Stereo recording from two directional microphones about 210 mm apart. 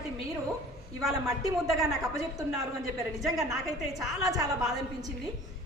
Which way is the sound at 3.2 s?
Centre (ahead or behind).